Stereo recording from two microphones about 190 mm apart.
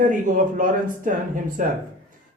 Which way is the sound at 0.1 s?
45° right (ahead or behind).